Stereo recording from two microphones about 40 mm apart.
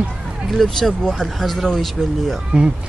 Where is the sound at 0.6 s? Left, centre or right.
Centre.